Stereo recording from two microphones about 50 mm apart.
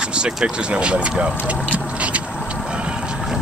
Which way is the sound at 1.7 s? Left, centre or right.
Right.